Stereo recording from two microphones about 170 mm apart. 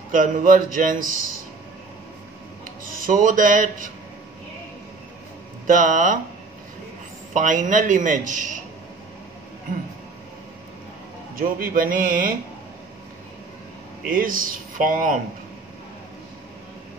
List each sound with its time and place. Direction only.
0.1 s a man's voice: 50° right (ahead or behind)
3.0 s a man's voice: 50° right (ahead or behind)
5.7 s a man's voice: 50° right (ahead or behind)
7.3 s a man's voice: 50° right (ahead or behind)
11.3 s a man's voice: 55° right (ahead or behind)
14.1 s a man's voice: 55° right (ahead or behind)